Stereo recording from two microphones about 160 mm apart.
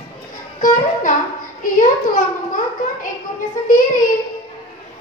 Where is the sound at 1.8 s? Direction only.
55° left (ahead or behind).